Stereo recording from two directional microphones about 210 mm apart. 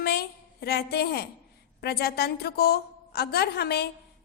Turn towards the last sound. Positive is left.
turn(degrees=50)  # may be behind; listen again after turning